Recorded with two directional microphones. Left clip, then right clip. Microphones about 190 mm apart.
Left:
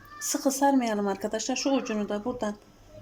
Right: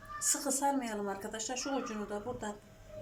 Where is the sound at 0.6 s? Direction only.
50° left (ahead or behind).